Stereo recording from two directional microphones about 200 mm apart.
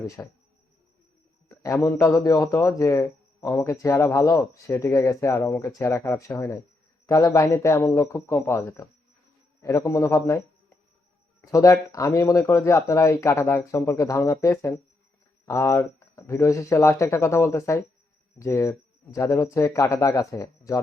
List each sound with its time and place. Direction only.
0.2 s speech: 10° left (ahead or behind)
1.5 s speech: 15° left (ahead or behind)